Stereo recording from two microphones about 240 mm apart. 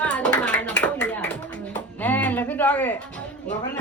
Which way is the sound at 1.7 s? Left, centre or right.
Centre.